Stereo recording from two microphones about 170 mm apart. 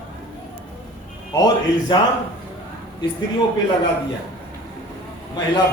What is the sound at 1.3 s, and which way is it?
Speech, 25° left (ahead or behind).